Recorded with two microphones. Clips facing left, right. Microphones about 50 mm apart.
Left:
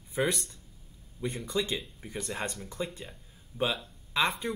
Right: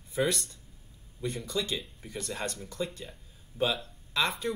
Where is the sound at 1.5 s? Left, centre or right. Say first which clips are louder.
Left 3 dB; centre.